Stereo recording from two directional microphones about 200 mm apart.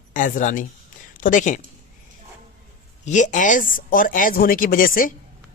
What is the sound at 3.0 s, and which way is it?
Speech, 40° left (ahead or behind).